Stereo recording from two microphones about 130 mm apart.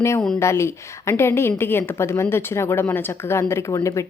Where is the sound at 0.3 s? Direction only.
20° left (ahead or behind).